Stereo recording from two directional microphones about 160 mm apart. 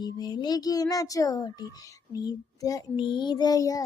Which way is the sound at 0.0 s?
25° left (ahead or behind).